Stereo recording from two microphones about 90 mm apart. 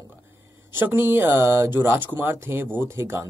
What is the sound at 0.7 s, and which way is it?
Speech, 25° right (ahead or behind).